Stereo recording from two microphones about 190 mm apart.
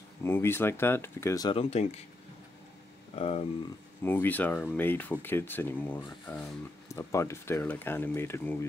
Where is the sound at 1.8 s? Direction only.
35° left (ahead or behind).